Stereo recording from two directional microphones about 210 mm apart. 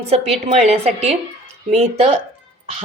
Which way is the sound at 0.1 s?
30° right (ahead or behind).